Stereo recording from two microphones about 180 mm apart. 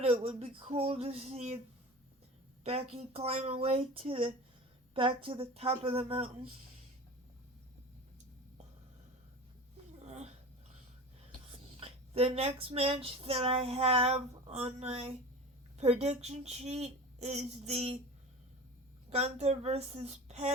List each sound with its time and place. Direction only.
0.0 s a woman's voice: 35° right (ahead or behind)
2.6 s a woman's voice: 35° right (ahead or behind)
10.0 s a sound: 40° right (ahead or behind)
11.5 s a sound: 30° right (ahead or behind)
15.8 s a woman's voice: 35° right (ahead or behind)
19.1 s a woman's voice: 35° right (ahead or behind)